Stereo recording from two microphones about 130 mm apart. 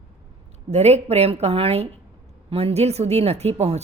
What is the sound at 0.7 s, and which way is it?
A woman's voice, 55° right (ahead or behind).